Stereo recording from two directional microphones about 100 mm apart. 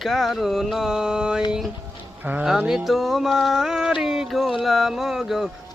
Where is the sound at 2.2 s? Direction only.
15° right (ahead or behind).